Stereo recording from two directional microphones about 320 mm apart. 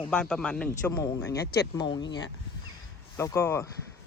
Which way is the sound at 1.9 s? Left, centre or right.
Left.